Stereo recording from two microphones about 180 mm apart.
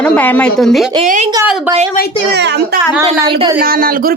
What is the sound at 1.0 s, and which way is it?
Speech, 40° right (ahead or behind).